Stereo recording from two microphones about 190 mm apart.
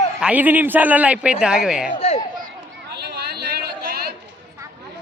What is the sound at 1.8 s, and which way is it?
Speech, 35° left (ahead or behind).